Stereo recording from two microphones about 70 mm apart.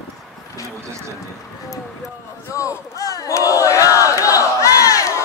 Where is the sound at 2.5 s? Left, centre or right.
Left.